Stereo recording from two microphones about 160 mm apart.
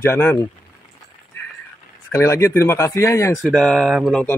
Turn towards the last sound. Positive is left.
turn(degrees=0)  # may be behind; listen again after turning